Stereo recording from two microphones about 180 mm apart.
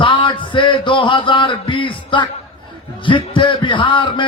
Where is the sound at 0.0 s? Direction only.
25° left (ahead or behind).